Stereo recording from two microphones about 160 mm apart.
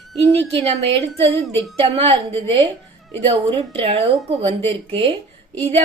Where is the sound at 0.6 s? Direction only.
40° right (ahead or behind).